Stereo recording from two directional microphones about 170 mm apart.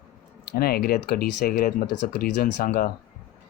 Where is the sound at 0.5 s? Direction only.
65° left (ahead or behind).